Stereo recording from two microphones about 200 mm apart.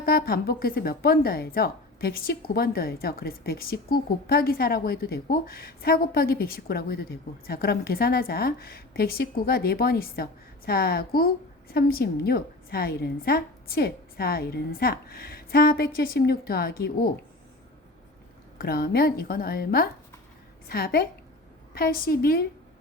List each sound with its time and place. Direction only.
0.0 s speech: 50° left (ahead or behind)
18.5 s speech: 50° left (ahead or behind)